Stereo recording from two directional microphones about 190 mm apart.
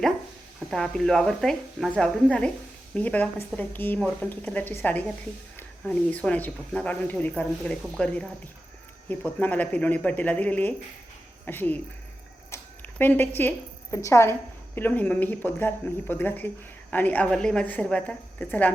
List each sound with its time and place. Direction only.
0.7 s a woman's voice: 5° left (ahead or behind)
13.0 s speech: 10° left (ahead or behind)